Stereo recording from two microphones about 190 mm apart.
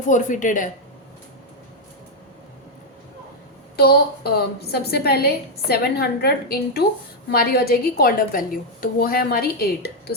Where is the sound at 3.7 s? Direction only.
55° left (ahead or behind).